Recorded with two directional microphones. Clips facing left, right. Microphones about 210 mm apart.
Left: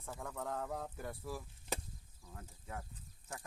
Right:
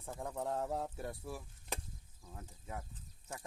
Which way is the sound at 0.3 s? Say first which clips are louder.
Right 4 dB; 25° right (ahead or behind).